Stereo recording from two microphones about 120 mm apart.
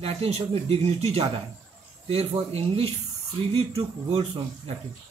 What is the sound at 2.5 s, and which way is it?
Speech, 55° right (ahead or behind).